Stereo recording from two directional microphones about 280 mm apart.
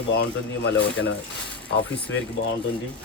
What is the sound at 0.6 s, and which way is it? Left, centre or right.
Speech, left.